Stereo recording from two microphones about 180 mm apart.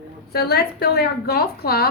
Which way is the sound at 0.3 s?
60° left (ahead or behind).